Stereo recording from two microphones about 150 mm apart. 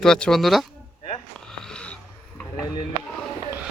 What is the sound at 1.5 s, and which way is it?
Wheeze, 5° left (ahead or behind).